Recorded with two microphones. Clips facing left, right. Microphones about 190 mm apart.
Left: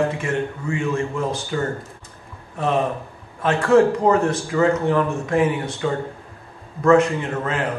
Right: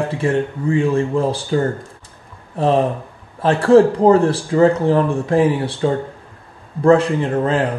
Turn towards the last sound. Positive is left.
turn(degrees=-30)  # may be behind; listen again after turning